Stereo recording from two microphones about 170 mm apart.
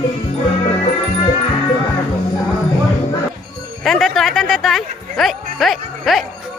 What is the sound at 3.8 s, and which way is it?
Music, centre (ahead or behind).